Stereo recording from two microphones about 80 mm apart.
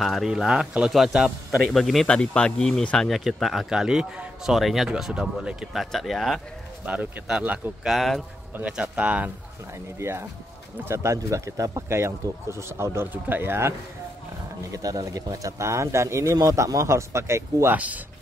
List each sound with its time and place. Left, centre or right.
0.0 s a man's voice: centre
2.0 s speech: centre
3.1 s a man's voice: centre
6.8 s speech: centre
7.8 s a man's voice: centre
8.5 s speech: centre
9.9 s speech: right
14.7 s speech: right
17.7 s speech: centre